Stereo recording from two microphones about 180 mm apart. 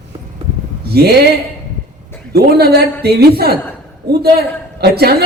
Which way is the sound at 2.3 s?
65° right (ahead or behind).